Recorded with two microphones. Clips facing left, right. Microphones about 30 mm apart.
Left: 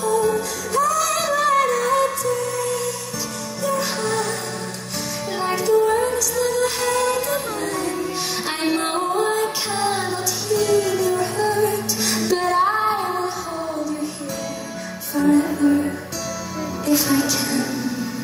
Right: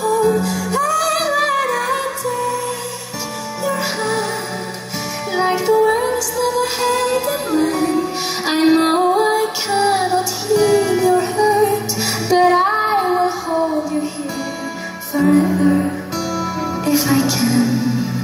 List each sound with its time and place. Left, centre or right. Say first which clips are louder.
0.1 s music: right 4 dB; centre
3.6 s music: right 2 dB; right
5.3 s music: right 4 dB; right
7.7 s music: right 6 dB; centre
11.1 s music: right 6 dB; centre
12.0 s music: right 1 dB; right
12.4 s female singing: right 4 dB; centre
13.5 s music: right 9 dB; centre
15.3 s music: right 4 dB; centre
16.8 s music: right 2 dB; right